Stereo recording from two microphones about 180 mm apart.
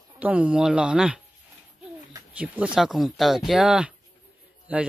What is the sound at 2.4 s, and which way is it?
Speech, 5° right (ahead or behind).